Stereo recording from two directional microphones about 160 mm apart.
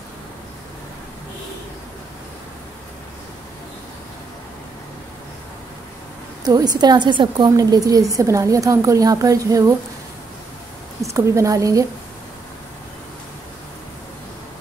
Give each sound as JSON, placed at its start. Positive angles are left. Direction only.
{"t": 6.4, "sound": "a woman's voice", "side_deg": -25}
{"t": 11.0, "sound": "a woman's voice", "side_deg": -20}